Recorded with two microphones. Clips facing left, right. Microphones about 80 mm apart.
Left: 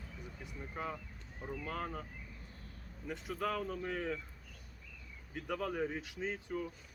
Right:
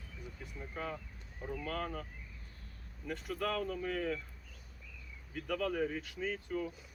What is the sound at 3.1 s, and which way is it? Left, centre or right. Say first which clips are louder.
Speech: right 1 dB; centre.